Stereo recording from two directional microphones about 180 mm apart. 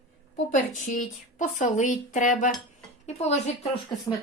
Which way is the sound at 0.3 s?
45° left (ahead or behind).